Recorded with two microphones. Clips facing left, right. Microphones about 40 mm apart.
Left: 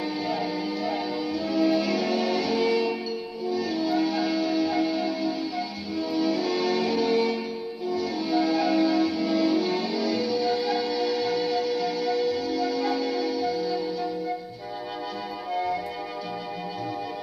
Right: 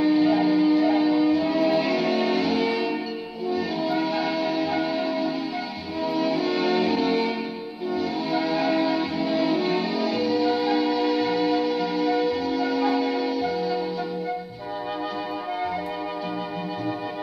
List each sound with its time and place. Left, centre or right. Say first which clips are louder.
0.0 s music: right 9 dB; right
15.5 s music: left 2 dB; right